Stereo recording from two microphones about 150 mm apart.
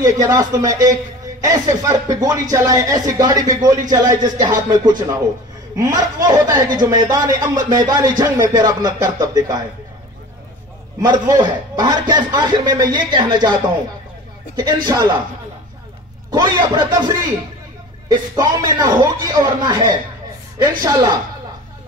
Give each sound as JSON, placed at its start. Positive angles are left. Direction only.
{"t": 0.0, "sound": "a man's voice", "side_deg": -25}
{"t": 11.0, "sound": "a man's voice", "side_deg": -25}
{"t": 14.9, "sound": "a man's voice", "side_deg": -20}
{"t": 16.3, "sound": "a man's voice", "side_deg": -25}